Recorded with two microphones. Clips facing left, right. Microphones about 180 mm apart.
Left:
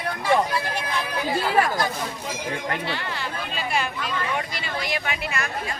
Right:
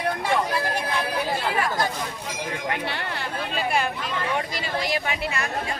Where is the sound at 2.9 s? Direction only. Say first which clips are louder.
Even; 60° right (ahead or behind).